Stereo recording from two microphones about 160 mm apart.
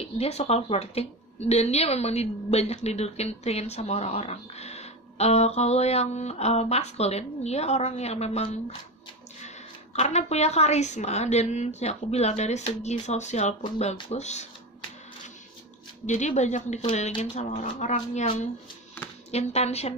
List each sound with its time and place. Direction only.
0.0 s speech: 40° left (ahead or behind)
9.9 s a woman's voice: 45° left (ahead or behind)
16.1 s a woman's voice: 45° left (ahead or behind)
19.3 s speech: 40° left (ahead or behind)